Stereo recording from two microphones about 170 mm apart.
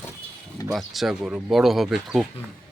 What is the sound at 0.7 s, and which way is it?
Speech, centre (ahead or behind).